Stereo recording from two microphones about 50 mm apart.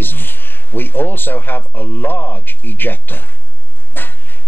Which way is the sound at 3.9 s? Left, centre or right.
Left.